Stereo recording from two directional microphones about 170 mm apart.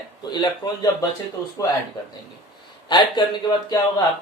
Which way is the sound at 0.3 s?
25° left (ahead or behind).